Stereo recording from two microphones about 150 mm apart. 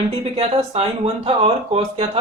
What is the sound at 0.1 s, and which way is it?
A man's voice, 40° right (ahead or behind).